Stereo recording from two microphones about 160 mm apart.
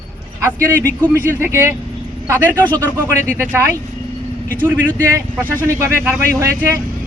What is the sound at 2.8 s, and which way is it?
Speech, 15° right (ahead or behind).